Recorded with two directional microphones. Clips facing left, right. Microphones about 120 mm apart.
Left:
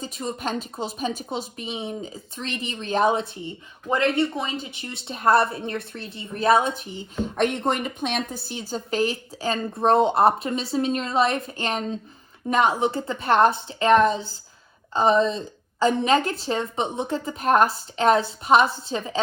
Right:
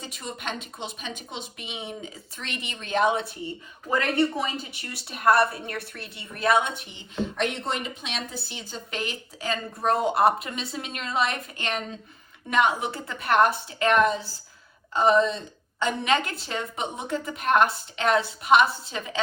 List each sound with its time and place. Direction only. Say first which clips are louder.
0.0 s a woman's voice: left 6 dB; 35° left (ahead or behind)
7.2 s a woman's voice: left 4 dB; 50° left (ahead or behind); by 19.2 s 30° left (ahead or behind)